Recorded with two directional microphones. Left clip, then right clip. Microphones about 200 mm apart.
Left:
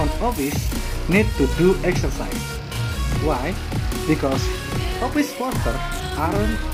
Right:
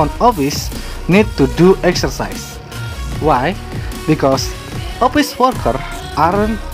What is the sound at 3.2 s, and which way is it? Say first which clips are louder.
Speech: right 11 dB; 50° right (ahead or behind).